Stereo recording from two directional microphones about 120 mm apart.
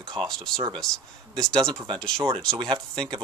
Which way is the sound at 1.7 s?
40° right (ahead or behind).